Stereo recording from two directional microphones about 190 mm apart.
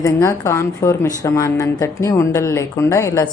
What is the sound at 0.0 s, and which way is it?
Speech, 15° left (ahead or behind).